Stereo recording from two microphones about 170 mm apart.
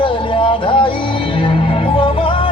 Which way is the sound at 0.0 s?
30° left (ahead or behind).